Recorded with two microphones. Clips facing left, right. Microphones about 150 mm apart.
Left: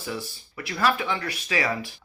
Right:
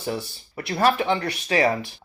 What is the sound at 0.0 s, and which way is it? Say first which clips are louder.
Speech: right 4 dB; 35° right (ahead or behind).